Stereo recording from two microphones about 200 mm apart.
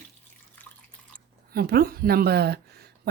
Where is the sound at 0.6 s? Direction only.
10° left (ahead or behind).